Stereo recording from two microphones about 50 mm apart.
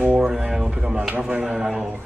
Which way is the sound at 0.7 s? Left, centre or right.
Centre.